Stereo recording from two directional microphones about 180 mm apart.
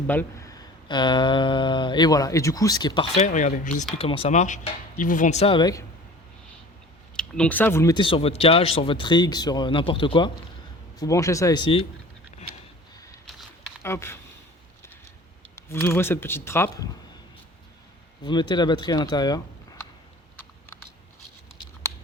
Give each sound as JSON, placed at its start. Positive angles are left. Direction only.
{"t": 0.1, "sound": "speech", "side_deg": 15}
{"t": 3.2, "sound": "speech", "side_deg": 45}
{"t": 3.9, "sound": "speech", "side_deg": 30}
{"t": 7.2, "sound": "speech", "side_deg": 5}
{"t": 7.9, "sound": "speech", "side_deg": 30}
{"t": 13.2, "sound": "a sound", "side_deg": 0}
{"t": 13.8, "sound": "speech", "side_deg": 15}
{"t": 15.5, "sound": "speech", "side_deg": 15}
{"t": 18.2, "sound": "speech", "side_deg": 25}